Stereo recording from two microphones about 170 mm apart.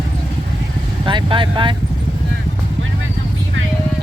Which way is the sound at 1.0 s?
30° right (ahead or behind).